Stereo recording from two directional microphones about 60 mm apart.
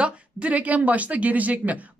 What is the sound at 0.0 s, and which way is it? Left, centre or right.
Speech, right.